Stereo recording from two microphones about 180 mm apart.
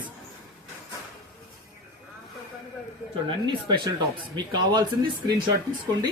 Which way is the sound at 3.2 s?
25° right (ahead or behind).